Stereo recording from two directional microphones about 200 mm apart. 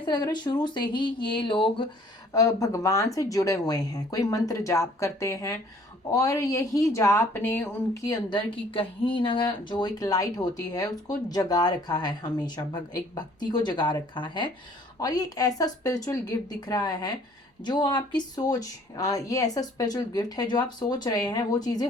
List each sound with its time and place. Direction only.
0.0 s speech: 20° left (ahead or behind)